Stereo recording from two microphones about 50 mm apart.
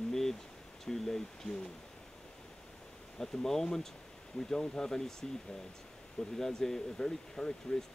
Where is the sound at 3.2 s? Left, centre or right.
Centre.